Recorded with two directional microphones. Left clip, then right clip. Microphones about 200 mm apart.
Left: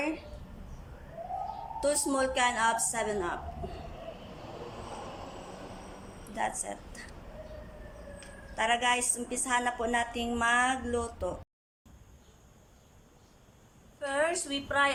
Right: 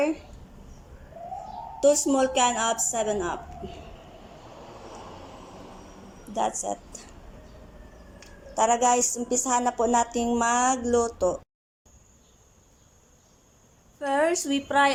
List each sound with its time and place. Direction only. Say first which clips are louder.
1.8 s a woman's voice: right 8 dB; 15° right (ahead or behind)
6.6 s a woman's voice: right 8 dB; 20° right (ahead or behind)
8.5 s a woman's voice: right 6 dB; 20° right (ahead or behind)
14.0 s a woman's voice: right 6 dB; 30° right (ahead or behind)